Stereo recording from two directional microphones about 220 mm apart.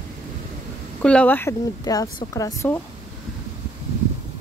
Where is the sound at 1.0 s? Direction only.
5° left (ahead or behind).